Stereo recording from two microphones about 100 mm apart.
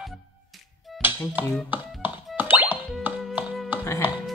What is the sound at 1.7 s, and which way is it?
Music, 20° right (ahead or behind).